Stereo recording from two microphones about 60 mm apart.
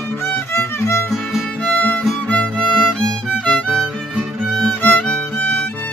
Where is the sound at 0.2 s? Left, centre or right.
Left.